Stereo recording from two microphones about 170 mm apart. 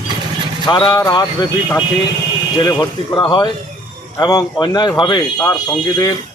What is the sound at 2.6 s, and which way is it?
Speech, 25° left (ahead or behind).